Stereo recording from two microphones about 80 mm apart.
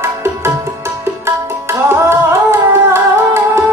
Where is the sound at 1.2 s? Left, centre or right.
Right.